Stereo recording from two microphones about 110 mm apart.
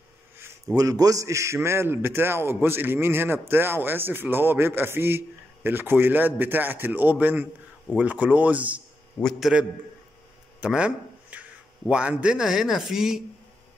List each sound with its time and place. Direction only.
0.7 s a man's voice: 35° right (ahead or behind); by 8.8 s 15° right (ahead or behind)
9.2 s speech: 5° left (ahead or behind)
10.6 s a sound: 10° right (ahead or behind)
11.9 s speech: 10° right (ahead or behind)